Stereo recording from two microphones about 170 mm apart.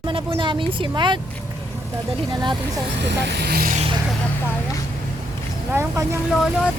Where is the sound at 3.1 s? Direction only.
75° right (ahead or behind).